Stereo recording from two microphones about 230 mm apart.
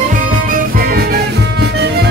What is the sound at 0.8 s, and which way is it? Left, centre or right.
Music, right.